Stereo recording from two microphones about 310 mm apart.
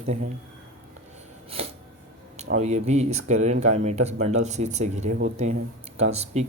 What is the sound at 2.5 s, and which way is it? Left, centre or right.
Speech, right.